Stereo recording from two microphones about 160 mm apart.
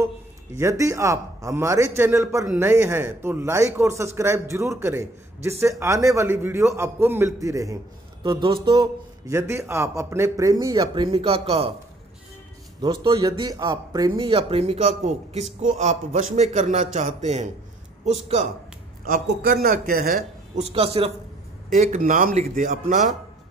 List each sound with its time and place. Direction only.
0.6 s a man's voice: 20° right (ahead or behind)
8.2 s speech: 30° right (ahead or behind)
9.3 s a man's voice: 15° right (ahead or behind)
11.1 s speech: 35° right (ahead or behind)
12.8 s a man's voice: 30° right (ahead or behind); by 18.5 s 45° right (ahead or behind)
19.0 s speech: 60° right (ahead or behind)
20.5 s speech: 40° right (ahead or behind)
21.7 s a man's voice: 50° right (ahead or behind)